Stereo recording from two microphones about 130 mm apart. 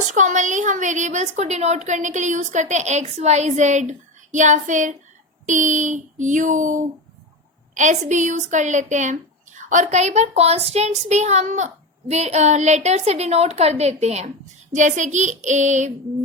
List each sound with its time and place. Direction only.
0.1 s a woman's voice: 70° right (ahead or behind)
14.7 s a woman's voice: 70° right (ahead or behind)